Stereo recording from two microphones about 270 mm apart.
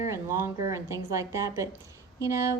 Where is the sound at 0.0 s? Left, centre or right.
Centre.